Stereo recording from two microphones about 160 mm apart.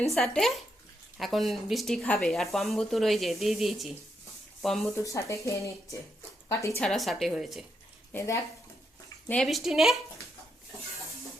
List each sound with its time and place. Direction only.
0.0 s speech: centre (ahead or behind)
4.9 s speech: 20° left (ahead or behind)
6.7 s speech: centre (ahead or behind)
9.3 s speech: centre (ahead or behind)